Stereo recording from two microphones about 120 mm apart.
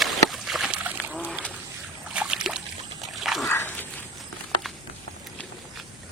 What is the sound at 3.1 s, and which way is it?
Dog, centre (ahead or behind).